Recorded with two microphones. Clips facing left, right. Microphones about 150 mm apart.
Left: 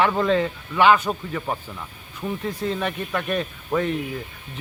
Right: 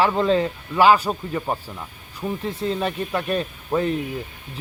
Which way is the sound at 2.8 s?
30° right (ahead or behind).